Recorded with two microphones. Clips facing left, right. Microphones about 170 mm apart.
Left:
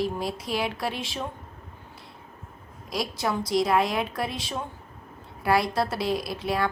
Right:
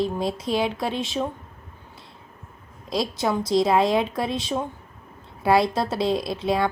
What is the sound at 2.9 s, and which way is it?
Speech, 25° right (ahead or behind).